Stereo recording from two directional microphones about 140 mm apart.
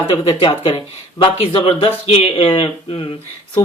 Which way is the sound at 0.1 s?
35° left (ahead or behind).